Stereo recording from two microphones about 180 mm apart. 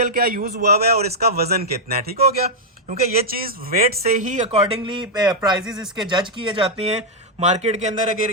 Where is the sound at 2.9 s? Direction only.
55° right (ahead or behind).